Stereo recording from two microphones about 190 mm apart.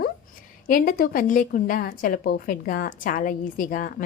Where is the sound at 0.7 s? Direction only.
50° left (ahead or behind).